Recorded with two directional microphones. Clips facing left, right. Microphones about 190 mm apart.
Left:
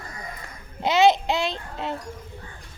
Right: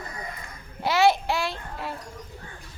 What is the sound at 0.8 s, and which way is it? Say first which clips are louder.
A child's voice: left 3 dB; 20° left (ahead or behind).